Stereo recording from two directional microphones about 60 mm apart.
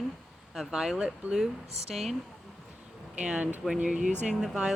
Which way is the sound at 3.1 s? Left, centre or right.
Right.